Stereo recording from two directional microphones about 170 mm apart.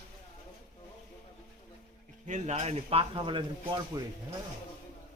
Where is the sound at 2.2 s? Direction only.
45° right (ahead or behind); by 4.0 s 30° right (ahead or behind).